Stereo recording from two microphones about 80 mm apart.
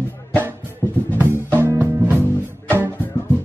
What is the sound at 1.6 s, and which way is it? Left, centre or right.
Music, right.